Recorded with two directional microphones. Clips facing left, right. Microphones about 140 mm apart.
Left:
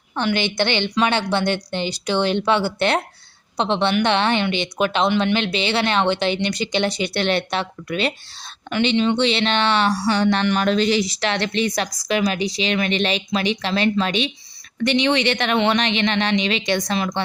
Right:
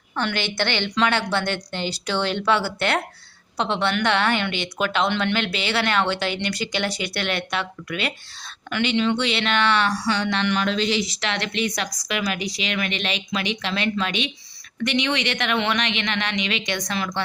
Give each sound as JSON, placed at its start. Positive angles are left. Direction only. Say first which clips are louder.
{"t": 0.2, "sound": "speech", "louder": "left 4 dB", "side_deg": 15}